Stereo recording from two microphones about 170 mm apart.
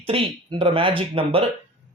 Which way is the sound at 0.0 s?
35° right (ahead or behind).